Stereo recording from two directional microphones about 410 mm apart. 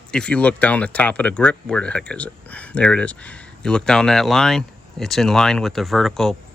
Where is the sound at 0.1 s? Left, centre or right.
Centre.